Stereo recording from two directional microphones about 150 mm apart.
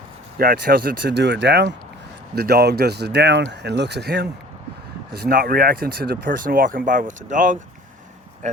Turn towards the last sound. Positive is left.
turn(degrees=-60)  # may be behind; listen again after turning